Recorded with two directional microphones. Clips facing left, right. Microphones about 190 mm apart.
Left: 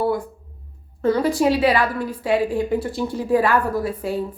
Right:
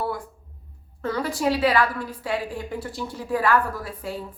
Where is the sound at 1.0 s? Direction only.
20° left (ahead or behind).